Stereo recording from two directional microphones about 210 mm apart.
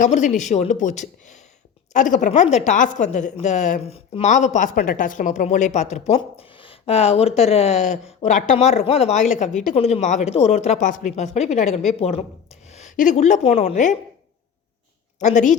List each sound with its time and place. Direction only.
0.0 s speech: 35° left (ahead or behind)
15.2 s speech: 35° left (ahead or behind)